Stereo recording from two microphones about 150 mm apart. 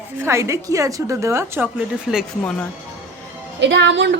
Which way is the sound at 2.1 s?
5° right (ahead or behind).